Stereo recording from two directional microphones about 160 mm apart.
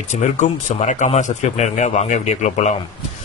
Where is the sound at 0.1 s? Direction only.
50° left (ahead or behind).